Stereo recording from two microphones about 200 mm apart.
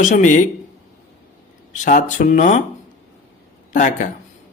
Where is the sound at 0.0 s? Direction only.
40° left (ahead or behind).